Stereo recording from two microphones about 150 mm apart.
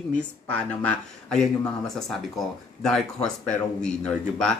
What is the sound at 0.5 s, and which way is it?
Speech, 5° left (ahead or behind).